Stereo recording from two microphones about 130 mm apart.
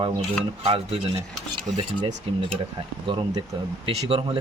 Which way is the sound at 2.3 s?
50° right (ahead or behind).